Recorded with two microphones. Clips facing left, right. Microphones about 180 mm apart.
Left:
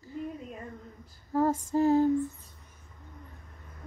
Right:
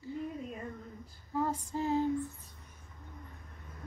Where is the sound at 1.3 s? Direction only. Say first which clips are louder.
Left 8 dB; 45° left (ahead or behind).